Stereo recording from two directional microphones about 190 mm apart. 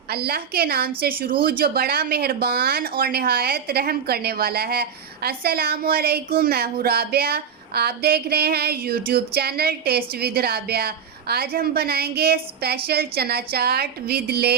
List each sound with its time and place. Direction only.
0.1 s speech: 55° right (ahead or behind)